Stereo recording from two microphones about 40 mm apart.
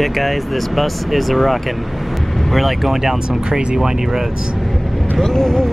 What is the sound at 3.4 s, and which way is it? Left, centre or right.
Speech, right.